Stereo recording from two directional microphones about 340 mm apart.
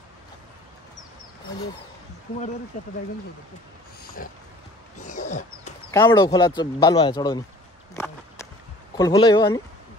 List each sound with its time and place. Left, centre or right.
2.8 s pig: left
4.2 s pig: left
5.0 s roaring cats: left
5.9 s speech: centre
7.9 s a sound: centre
8.9 s speech: centre